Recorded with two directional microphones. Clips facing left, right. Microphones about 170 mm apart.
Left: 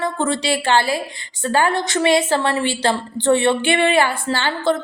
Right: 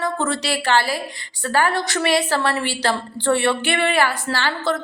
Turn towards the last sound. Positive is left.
turn(degrees=25)  # may be behind; listen again after turning